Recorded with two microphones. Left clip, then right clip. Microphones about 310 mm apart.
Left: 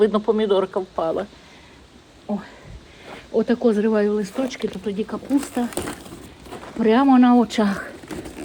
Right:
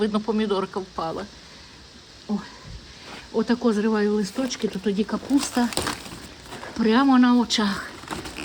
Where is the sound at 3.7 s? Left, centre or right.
Centre.